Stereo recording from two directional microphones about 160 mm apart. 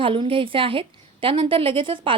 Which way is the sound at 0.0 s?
30° right (ahead or behind).